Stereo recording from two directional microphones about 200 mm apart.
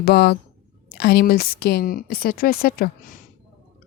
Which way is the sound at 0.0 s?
50° left (ahead or behind).